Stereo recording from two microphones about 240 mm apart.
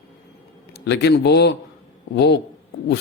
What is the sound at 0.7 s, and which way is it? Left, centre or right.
A man's voice, left.